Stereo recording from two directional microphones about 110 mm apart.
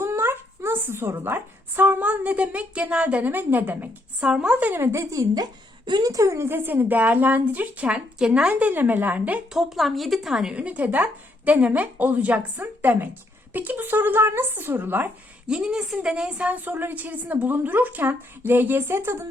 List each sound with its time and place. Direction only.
0.0 s a woman's voice: 25° right (ahead or behind)
5.3 s a woman's voice: 40° right (ahead or behind); by 9.6 s 15° right (ahead or behind)
9.6 s a woman's voice: centre (ahead or behind); by 19.1 s 20° right (ahead or behind)